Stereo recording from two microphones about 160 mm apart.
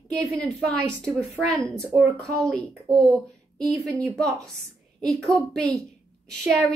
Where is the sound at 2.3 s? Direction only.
5° left (ahead or behind).